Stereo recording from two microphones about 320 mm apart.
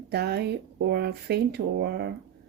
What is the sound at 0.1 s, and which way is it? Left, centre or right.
A woman's voice, right.